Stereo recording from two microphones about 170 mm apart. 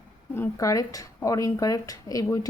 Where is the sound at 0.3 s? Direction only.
15° left (ahead or behind).